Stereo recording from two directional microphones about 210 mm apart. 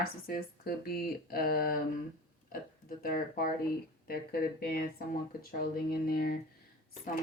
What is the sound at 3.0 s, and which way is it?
Speech, 45° left (ahead or behind).